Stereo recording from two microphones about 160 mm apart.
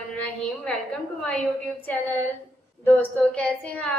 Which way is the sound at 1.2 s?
5° left (ahead or behind).